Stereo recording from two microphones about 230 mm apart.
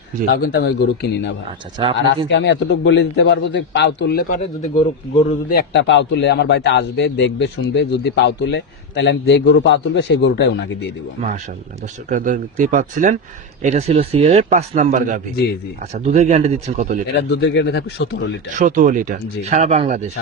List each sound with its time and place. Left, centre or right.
0.3 s a man's voice: left
1.8 s speech: right
2.3 s a man's voice: left
5.5 s a man's voice: left
12.0 s speech: right
17.2 s a man's voice: left
18.6 s speech: right